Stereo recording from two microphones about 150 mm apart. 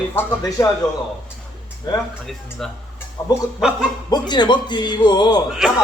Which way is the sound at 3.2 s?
20° left (ahead or behind).